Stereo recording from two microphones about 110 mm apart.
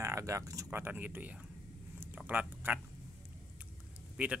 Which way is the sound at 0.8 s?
15° right (ahead or behind).